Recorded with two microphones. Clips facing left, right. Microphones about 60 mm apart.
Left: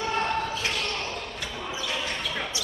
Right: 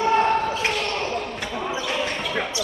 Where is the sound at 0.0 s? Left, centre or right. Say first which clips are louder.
Right 8 dB; right.